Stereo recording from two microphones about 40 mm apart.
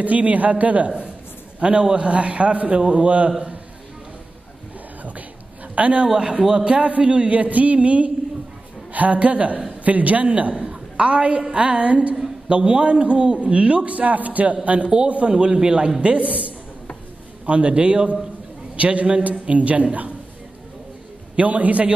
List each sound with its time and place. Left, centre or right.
0.0 s a man's voice: right
5.8 s a man's voice: right
21.4 s a man's voice: right